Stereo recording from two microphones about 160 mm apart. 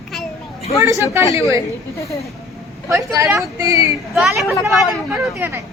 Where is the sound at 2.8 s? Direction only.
20° right (ahead or behind).